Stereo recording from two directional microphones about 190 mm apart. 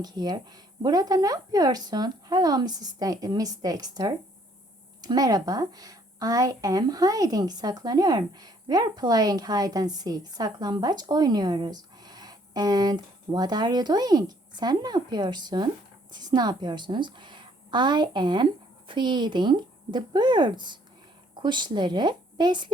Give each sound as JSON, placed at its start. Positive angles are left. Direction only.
{"t": 0.0, "sound": "a woman's voice", "side_deg": -20}